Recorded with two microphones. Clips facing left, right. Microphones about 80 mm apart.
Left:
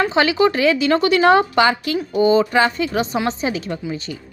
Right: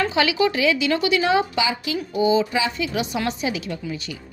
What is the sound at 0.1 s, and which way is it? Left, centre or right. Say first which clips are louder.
A woman's voice: left 4 dB; left.